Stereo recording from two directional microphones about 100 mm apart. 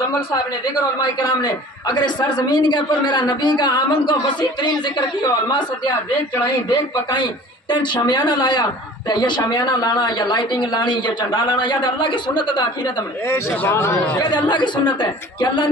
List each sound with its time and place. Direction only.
1.0 s a man's voice: 50° left (ahead or behind)
6.7 s a man's voice: 50° left (ahead or behind)
13.3 s speech: 25° left (ahead or behind)
14.2 s a man's voice: 50° left (ahead or behind)